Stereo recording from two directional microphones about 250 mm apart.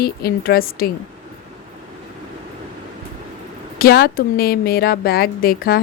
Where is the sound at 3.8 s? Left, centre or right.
Left.